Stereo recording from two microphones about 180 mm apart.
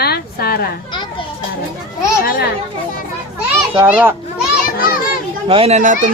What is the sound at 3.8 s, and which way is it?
Speech, 10° right (ahead or behind).